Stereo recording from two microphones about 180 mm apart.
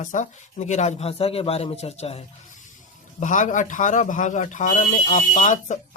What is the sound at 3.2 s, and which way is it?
Speech, 45° left (ahead or behind).